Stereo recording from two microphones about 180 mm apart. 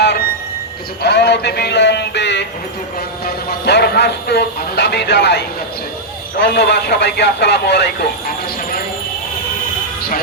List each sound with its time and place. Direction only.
1.0 s speech: 70° left (ahead or behind)
3.2 s speech: 65° left (ahead or behind)
6.4 s speech: 70° left (ahead or behind)